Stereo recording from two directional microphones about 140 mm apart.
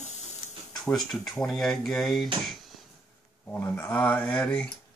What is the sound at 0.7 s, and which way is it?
Speech, 5° left (ahead or behind).